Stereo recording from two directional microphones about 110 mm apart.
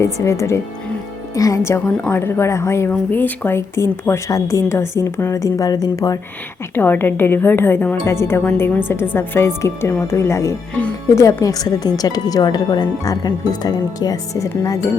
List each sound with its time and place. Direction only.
0.0 s a woman's voice: 25° left (ahead or behind)
6.7 s a woman's voice: 20° left (ahead or behind)
10.8 s speech: 10° left (ahead or behind)
11.1 s speech: 30° left (ahead or behind)